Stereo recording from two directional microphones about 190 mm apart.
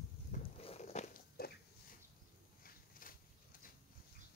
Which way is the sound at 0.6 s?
30° left (ahead or behind).